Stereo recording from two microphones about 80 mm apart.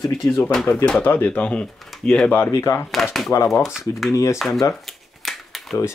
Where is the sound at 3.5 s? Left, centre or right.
Centre.